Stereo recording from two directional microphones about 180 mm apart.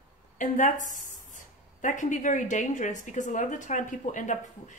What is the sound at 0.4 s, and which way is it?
A woman's voice, 45° left (ahead or behind).